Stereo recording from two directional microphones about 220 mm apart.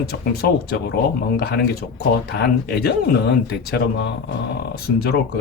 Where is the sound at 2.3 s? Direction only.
45° left (ahead or behind).